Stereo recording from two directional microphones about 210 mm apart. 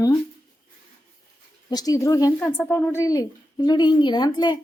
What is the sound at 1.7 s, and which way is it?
A woman's voice, 15° left (ahead or behind).